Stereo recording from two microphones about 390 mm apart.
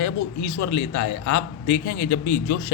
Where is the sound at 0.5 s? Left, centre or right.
Left.